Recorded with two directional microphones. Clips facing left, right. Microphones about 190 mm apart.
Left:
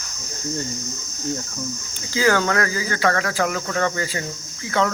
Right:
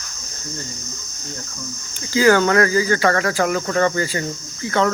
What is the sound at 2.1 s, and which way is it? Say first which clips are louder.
Speech: right 5 dB; centre (ahead or behind).